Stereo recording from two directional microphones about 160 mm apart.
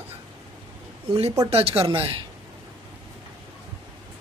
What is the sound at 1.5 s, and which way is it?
Speech, 40° right (ahead or behind).